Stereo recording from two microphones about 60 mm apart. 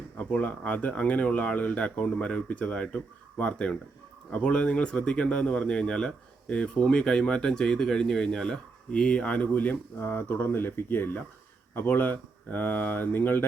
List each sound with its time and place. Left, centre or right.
0.2 s speech: left
10.0 s speech: left